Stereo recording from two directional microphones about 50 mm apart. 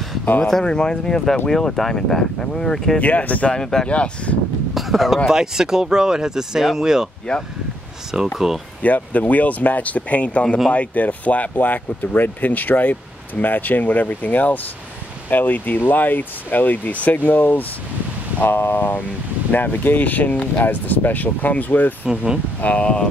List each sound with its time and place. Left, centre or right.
0.2 s a sound: left
0.5 s speech: centre
3.0 s speech: left
3.5 s speech: centre
3.9 s speech: left
4.7 s speech: centre
7.3 s speech: centre
8.1 s speech: centre
8.8 s speech: left
22.1 s speech: centre
22.6 s speech: left